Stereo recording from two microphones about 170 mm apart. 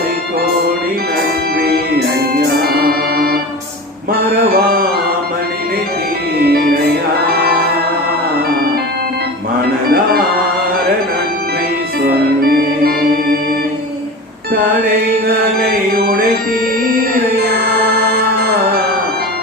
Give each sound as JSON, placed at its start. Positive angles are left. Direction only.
{"t": 1.5, "sound": "music", "side_deg": -60}
{"t": 4.5, "sound": "music", "side_deg": -60}
{"t": 7.3, "sound": "music", "side_deg": -65}
{"t": 12.4, "sound": "organ", "side_deg": -60}
{"t": 15.6, "sound": "music", "side_deg": -60}